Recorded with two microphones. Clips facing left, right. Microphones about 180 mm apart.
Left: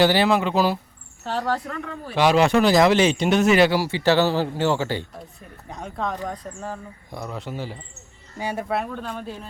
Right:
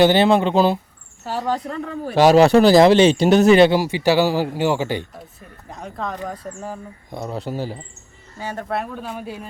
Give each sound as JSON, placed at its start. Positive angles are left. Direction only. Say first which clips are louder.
{"t": 0.0, "sound": "speech", "louder": "right 4 dB", "side_deg": -25}
{"t": 1.2, "sound": "speech", "louder": "right 2 dB", "side_deg": -10}
{"t": 1.8, "sound": "speech", "louder": "right 7 dB", "side_deg": -35}
{"t": 5.6, "sound": "speech", "louder": "even", "side_deg": 0}
{"t": 7.1, "sound": "speech", "louder": "right 5 dB", "side_deg": -25}
{"t": 8.4, "sound": "speech", "louder": "left 1 dB", "side_deg": 10}
{"t": 8.7, "sound": "speech", "louder": "even", "side_deg": 0}